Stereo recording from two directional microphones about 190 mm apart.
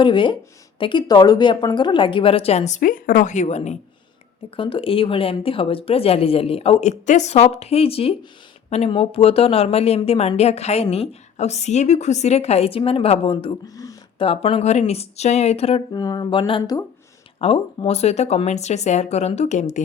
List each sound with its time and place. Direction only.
0.0 s a woman's voice: 25° left (ahead or behind)
15.9 s a woman's voice: 20° left (ahead or behind); by 19.8 s 40° left (ahead or behind)